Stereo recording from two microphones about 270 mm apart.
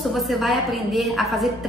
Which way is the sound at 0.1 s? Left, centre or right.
Centre.